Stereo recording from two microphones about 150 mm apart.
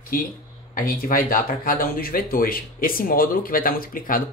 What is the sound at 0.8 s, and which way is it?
Speech, 70° left (ahead or behind).